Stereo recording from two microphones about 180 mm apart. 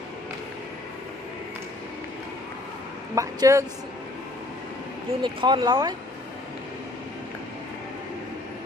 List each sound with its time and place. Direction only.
3.2 s speech: 15° right (ahead or behind)
5.2 s speech: 25° right (ahead or behind)